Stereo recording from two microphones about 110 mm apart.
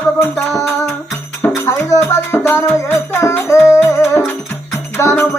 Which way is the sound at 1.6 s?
30° left (ahead or behind).